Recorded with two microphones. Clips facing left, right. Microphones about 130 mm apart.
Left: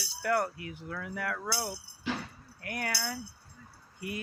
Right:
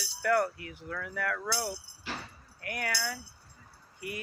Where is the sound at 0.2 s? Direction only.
25° left (ahead or behind).